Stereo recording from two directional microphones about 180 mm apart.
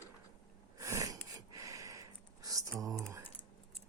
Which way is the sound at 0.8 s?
15° right (ahead or behind).